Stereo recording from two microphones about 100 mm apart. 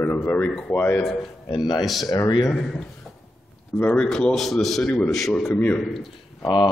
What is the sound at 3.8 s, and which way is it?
A man's voice, 15° left (ahead or behind).